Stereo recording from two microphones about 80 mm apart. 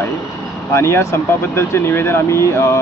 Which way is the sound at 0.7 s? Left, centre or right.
Left.